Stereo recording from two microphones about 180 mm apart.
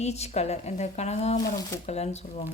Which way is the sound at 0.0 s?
35° left (ahead or behind).